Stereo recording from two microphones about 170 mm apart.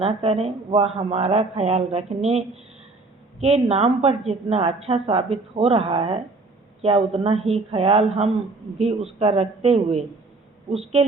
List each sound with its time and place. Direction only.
0.0 s a woman's voice: 35° right (ahead or behind)
3.4 s a woman's voice: 35° right (ahead or behind)